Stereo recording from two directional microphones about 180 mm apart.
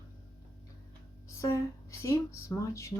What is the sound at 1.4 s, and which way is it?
Speech, 15° left (ahead or behind).